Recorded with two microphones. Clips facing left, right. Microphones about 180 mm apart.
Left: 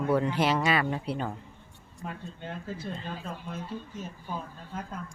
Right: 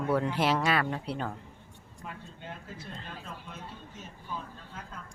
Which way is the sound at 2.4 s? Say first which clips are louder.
Left 9 dB; 30° left (ahead or behind).